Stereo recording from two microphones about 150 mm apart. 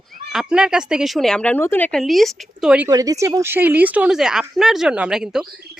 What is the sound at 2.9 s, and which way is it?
Speech, 25° right (ahead or behind).